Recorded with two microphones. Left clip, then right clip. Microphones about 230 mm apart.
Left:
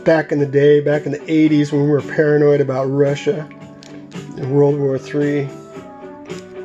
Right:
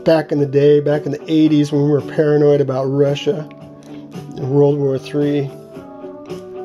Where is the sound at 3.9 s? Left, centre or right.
Centre.